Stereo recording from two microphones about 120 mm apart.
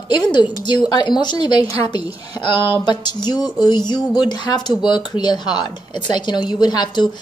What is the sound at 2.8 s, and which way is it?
A woman's voice, 35° left (ahead or behind).